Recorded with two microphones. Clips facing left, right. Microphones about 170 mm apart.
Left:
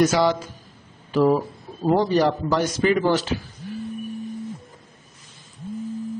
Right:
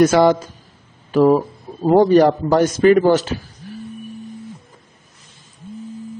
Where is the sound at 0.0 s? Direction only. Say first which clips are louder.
Right 6 dB; 50° right (ahead or behind).